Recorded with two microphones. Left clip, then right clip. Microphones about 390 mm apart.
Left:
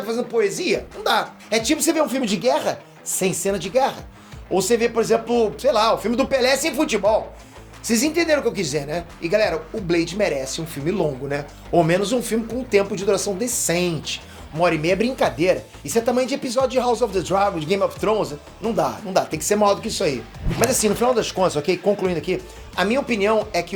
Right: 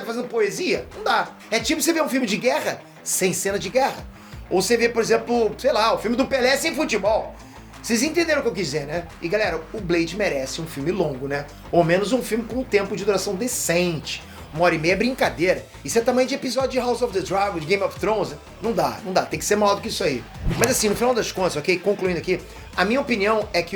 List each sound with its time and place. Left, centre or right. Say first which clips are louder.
0.1 s speech: left 2 dB; left